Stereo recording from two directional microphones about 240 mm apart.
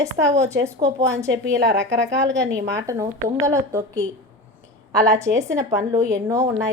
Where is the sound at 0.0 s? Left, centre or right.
Centre.